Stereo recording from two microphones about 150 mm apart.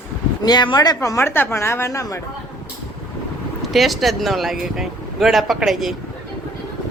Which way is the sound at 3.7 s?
Centre (ahead or behind).